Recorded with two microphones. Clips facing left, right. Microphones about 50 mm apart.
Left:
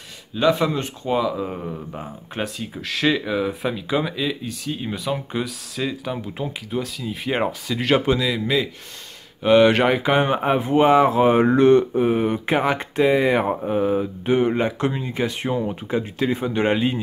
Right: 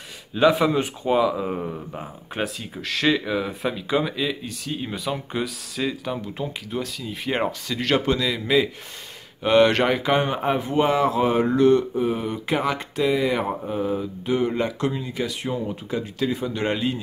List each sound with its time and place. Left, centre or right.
0.3 s speech: centre; by 17.0 s left